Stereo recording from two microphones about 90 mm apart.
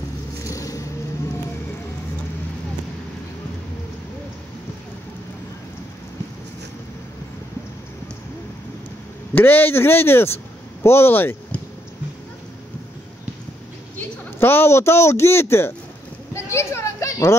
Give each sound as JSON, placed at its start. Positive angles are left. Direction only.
{"t": 0.5, "sound": "vehicle", "side_deg": 35}
{"t": 9.3, "sound": "speech", "side_deg": 20}
{"t": 13.9, "sound": "a woman's voice", "side_deg": 25}
{"t": 16.3, "sound": "children playing", "side_deg": 30}